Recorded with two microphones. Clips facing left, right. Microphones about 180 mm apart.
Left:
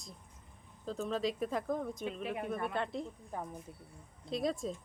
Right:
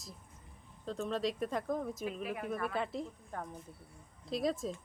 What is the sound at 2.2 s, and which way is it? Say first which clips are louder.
Speech: left 1 dB; 25° left (ahead or behind).